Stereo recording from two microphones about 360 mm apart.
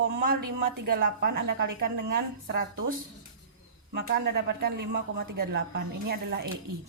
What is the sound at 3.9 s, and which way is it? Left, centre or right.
A woman's voice, right.